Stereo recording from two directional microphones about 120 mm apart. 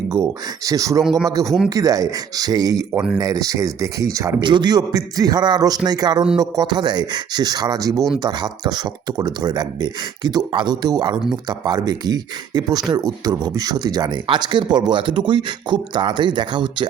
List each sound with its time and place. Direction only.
0.1 s speech: 30° right (ahead or behind)
1.0 s speech: 5° left (ahead or behind)
1.7 s speech: 30° right (ahead or behind)
2.9 s speech: 10° right (ahead or behind)
3.2 s speech: 30° right (ahead or behind)
4.4 s speech: 40° right (ahead or behind)